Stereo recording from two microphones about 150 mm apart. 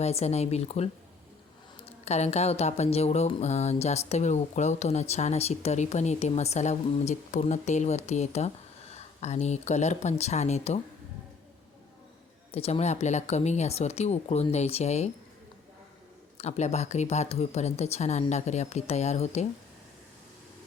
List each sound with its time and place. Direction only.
0.0 s speech: 45° left (ahead or behind)
2.0 s speech: 45° left (ahead or behind)
12.5 s speech: 40° left (ahead or behind)
16.4 s speech: 50° left (ahead or behind)